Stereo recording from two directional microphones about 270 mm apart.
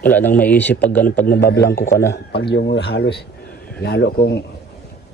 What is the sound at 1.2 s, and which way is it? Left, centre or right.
Speech, left.